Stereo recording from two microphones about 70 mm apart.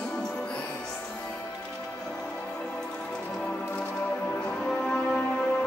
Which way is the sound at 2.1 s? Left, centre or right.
Centre.